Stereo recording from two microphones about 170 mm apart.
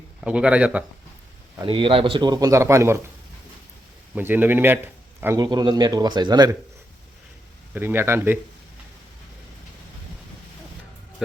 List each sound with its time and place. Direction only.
0.2 s speech: 5° right (ahead or behind)
1.6 s speech: 30° right (ahead or behind)
4.1 s speech: 10° right (ahead or behind)
7.7 s speech: 10° right (ahead or behind)